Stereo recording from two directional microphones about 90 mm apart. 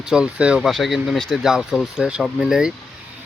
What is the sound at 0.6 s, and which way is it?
Speech, centre (ahead or behind).